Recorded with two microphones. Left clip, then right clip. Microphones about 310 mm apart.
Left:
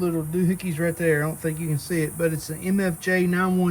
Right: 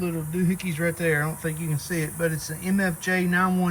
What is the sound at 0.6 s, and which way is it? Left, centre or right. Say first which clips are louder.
Speech: left 1 dB; left.